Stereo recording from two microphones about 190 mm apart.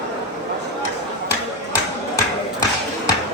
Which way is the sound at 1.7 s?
15° left (ahead or behind).